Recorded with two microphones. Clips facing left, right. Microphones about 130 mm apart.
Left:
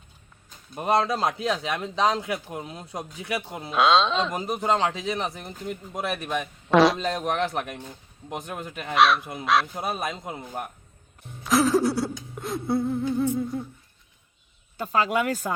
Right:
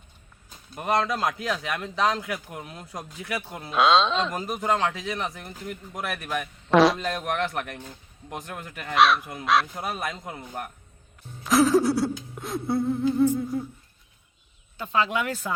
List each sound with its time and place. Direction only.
0.8 s a man's voice: 25° left (ahead or behind)
3.7 s a sound: centre (ahead or behind)
4.4 s a man's voice: 25° left (ahead or behind)
6.7 s a man's voice: centre (ahead or behind)
7.0 s a man's voice: 25° left (ahead or behind)
8.9 s a sound: centre (ahead or behind)
9.7 s a man's voice: 25° left (ahead or behind)
11.4 s a sound: centre (ahead or behind)
14.8 s speech: 40° left (ahead or behind)